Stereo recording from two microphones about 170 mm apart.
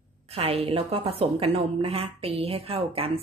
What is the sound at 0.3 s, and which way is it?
A woman's voice, 35° right (ahead or behind).